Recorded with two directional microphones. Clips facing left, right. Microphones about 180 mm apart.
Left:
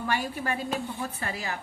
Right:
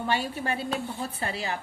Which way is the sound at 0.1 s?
30° right (ahead or behind).